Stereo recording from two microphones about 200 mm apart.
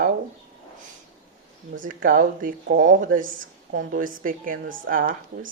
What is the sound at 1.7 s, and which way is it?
A woman's voice, 40° right (ahead or behind).